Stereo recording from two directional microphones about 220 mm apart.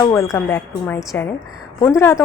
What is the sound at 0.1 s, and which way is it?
Speech, 10° left (ahead or behind).